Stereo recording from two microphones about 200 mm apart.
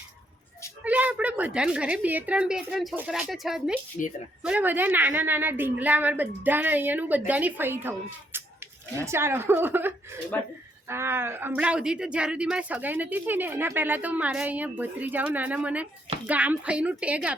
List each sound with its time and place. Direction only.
0.9 s a woman's voice: 5° right (ahead or behind)
4.0 s a woman's voice: 40° left (ahead or behind)
4.4 s speech: 5° right (ahead or behind)
10.3 s speech: 5° left (ahead or behind)
10.8 s speech: 10° right (ahead or behind)